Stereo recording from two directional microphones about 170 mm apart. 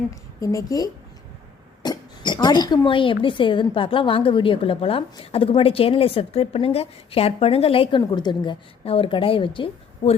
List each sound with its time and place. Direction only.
0.1 s a woman's voice: 20° left (ahead or behind); by 10.2 s 35° left (ahead or behind)